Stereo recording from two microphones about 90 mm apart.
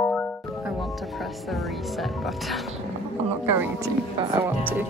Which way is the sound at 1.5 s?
Centre (ahead or behind).